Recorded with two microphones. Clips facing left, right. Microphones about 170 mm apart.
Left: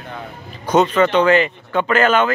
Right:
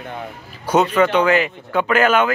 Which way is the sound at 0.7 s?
10° right (ahead or behind).